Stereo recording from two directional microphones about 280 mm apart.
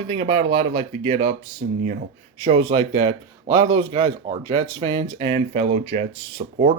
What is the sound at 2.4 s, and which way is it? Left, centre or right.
Speech, centre.